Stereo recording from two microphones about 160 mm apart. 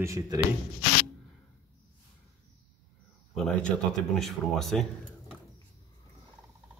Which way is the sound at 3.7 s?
Centre (ahead or behind).